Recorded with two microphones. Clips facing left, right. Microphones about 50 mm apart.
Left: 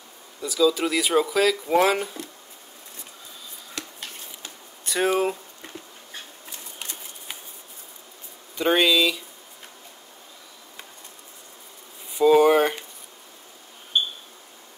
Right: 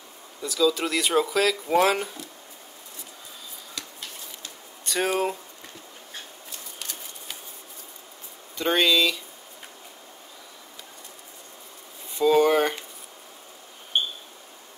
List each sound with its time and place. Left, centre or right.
0.4 s speech: centre
4.8 s speech: centre
6.8 s typewriter: left
8.5 s speech: centre
12.2 s a sound: centre